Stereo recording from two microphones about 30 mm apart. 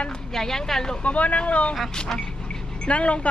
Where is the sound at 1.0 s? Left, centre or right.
Left.